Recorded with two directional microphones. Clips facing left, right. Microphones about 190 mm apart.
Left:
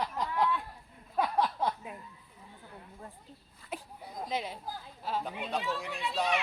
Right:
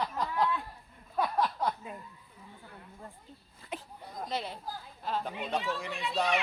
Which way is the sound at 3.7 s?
10° left (ahead or behind).